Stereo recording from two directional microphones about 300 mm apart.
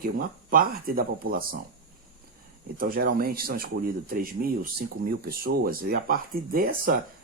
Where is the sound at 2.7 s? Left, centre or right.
Right.